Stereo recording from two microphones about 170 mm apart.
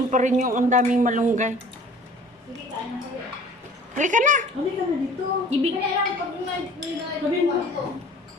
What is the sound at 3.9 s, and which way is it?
Speech, 50° right (ahead or behind).